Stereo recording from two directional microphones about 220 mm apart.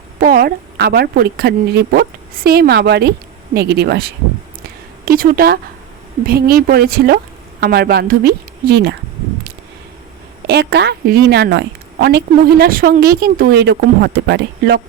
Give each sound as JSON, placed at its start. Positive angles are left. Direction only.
{"t": 0.2, "sound": "a woman's voice", "side_deg": -40}
{"t": 10.4, "sound": "a woman's voice", "side_deg": -50}